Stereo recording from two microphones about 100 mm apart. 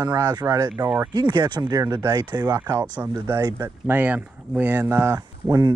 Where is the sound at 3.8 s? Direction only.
15° right (ahead or behind).